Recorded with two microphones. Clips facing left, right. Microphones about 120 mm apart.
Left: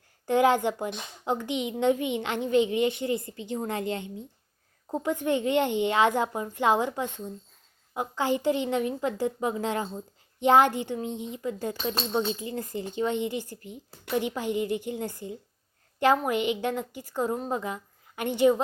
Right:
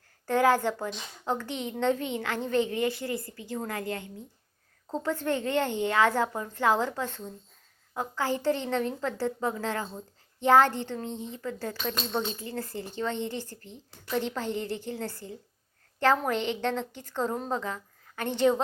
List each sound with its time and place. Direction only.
0.3 s a woman's voice: 20° left (ahead or behind)